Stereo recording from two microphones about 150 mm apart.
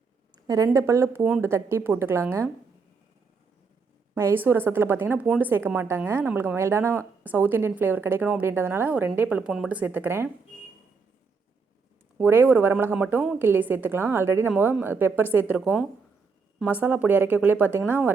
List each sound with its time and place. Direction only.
0.4 s speech: 25° right (ahead or behind)
4.1 s speech: 15° right (ahead or behind)
12.1 s speech: 15° right (ahead or behind)